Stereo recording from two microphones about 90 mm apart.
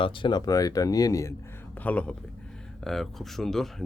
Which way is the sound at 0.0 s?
60° left (ahead or behind).